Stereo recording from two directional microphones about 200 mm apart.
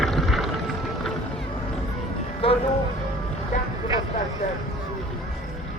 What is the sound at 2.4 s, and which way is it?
Speech, 30° left (ahead or behind).